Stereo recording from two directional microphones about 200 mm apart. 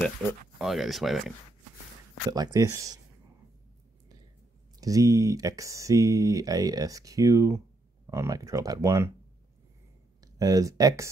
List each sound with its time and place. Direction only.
0.6 s speech: centre (ahead or behind)
2.3 s speech: 20° right (ahead or behind)
4.7 s speech: 15° right (ahead or behind)
10.2 s speech: 20° right (ahead or behind)